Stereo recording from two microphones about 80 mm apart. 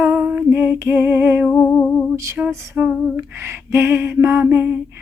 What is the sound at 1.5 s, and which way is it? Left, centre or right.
Music, centre.